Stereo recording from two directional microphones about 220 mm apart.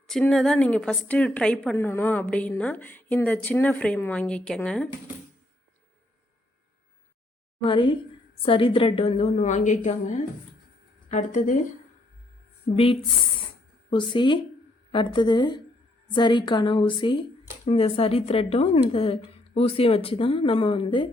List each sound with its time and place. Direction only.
0.1 s a woman's voice: centre (ahead or behind)
7.6 s a woman's voice: 20° left (ahead or behind)
12.7 s a woman's voice: 25° left (ahead or behind)